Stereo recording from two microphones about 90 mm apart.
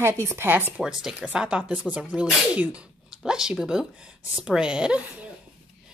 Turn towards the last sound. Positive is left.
turn(degrees=-10)  # may be behind; listen again after turning